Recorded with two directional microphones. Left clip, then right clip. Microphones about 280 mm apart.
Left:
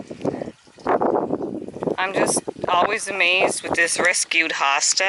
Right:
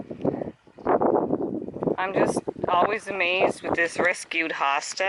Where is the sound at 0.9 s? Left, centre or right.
Centre.